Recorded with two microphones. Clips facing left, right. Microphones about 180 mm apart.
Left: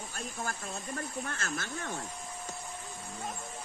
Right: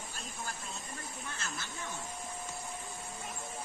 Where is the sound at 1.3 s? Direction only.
55° left (ahead or behind).